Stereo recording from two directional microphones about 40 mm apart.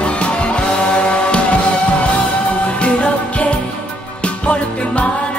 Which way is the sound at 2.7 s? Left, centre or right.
Left.